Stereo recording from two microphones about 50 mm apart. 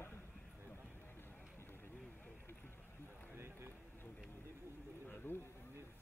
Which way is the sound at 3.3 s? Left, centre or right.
Right.